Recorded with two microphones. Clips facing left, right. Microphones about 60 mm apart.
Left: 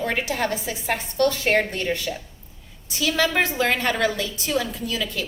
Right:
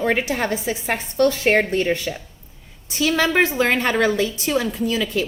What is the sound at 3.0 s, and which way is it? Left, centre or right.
A woman's voice, right.